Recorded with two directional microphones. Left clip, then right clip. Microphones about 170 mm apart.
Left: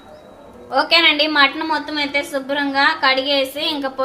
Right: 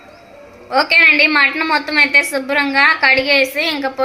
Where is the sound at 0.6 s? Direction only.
5° right (ahead or behind).